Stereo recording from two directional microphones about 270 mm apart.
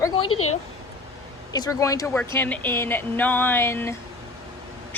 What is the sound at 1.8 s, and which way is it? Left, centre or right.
Speech, centre.